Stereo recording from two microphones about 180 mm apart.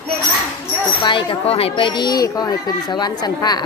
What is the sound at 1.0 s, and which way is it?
Speech, 30° left (ahead or behind).